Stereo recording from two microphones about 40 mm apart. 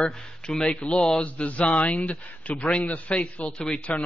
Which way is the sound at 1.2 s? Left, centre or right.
Left.